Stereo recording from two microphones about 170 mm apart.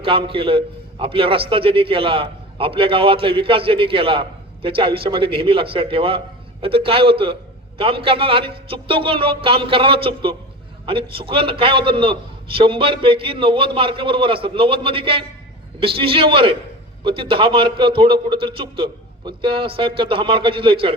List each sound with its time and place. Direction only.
0.0 s a man's voice: 30° right (ahead or behind)